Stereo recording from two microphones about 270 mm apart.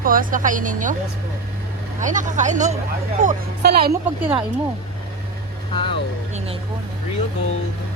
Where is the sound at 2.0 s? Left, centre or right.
Right.